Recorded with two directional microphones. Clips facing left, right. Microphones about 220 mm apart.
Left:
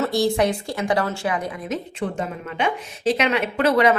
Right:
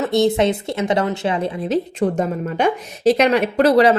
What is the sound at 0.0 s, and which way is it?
A woman's voice, 20° right (ahead or behind).